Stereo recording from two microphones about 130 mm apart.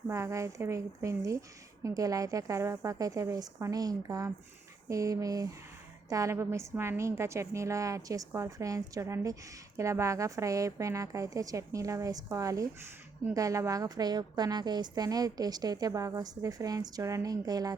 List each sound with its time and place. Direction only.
0.1 s a woman's voice: 25° right (ahead or behind)